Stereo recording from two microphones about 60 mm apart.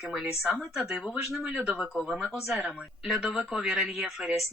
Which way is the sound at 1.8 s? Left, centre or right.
Centre.